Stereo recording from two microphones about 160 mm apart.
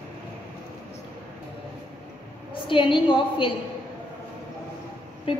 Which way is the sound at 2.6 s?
30° left (ahead or behind).